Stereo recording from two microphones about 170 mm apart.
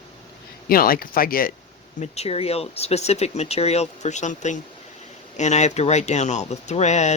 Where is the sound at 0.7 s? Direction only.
60° left (ahead or behind).